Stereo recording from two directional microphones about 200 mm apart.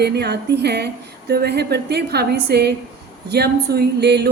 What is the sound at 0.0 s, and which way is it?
A woman's voice, 55° right (ahead or behind).